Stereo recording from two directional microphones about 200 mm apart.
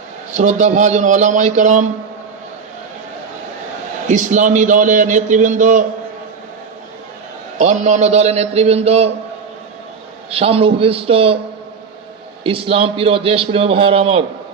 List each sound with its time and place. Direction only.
0.3 s speech: 35° right (ahead or behind)
4.1 s speech: 35° right (ahead or behind)
7.6 s speech: 35° right (ahead or behind)
10.2 s a man's voice: 30° right (ahead or behind)
12.4 s a man's voice: 25° right (ahead or behind)